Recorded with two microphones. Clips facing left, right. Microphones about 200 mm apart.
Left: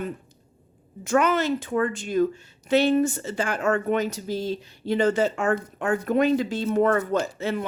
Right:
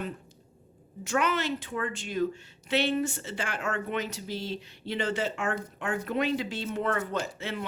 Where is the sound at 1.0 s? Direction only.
45° left (ahead or behind).